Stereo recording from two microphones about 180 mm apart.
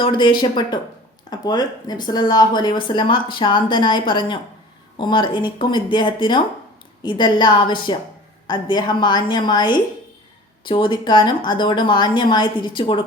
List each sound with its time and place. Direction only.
0.0 s speech: 25° left (ahead or behind)